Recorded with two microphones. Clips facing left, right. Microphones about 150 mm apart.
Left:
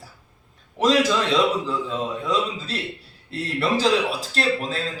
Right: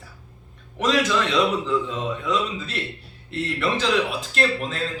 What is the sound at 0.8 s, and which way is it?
Speech, 35° left (ahead or behind).